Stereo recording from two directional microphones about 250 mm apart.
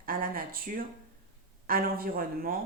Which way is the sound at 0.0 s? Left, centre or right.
Right.